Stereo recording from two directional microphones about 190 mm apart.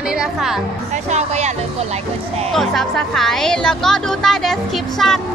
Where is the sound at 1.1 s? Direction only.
35° right (ahead or behind).